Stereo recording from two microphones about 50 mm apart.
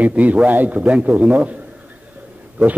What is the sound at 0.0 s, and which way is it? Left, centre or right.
A man's voice, right.